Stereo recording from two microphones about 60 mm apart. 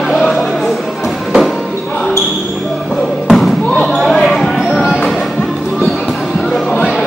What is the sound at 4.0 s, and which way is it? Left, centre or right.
Basketball bounce, centre.